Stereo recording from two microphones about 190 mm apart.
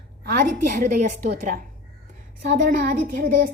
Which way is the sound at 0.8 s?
40° right (ahead or behind).